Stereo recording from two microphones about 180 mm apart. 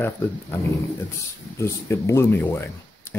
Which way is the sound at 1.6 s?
15° left (ahead or behind).